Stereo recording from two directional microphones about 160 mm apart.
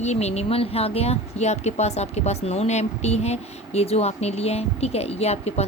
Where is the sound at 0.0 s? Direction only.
45° left (ahead or behind).